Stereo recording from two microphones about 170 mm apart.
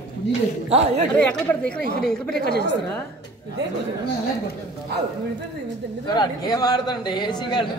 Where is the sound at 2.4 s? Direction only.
75° left (ahead or behind).